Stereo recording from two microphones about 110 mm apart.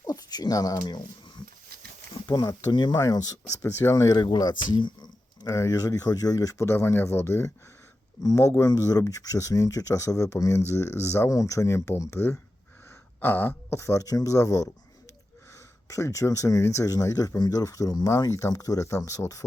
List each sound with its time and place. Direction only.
0.0 s speech: 35° left (ahead or behind)
2.2 s speech: 35° left (ahead or behind)
4.3 s speech: 45° left (ahead or behind); by 12.3 s 25° left (ahead or behind)
13.1 s throat clearing: 15° left (ahead or behind)
13.7 s speech: 25° left (ahead or behind)
15.9 s speech: 25° left (ahead or behind)